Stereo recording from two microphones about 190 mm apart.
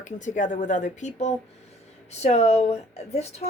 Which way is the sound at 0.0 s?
40° left (ahead or behind).